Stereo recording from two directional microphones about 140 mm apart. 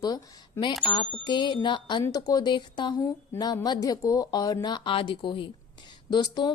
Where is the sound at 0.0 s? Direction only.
30° left (ahead or behind).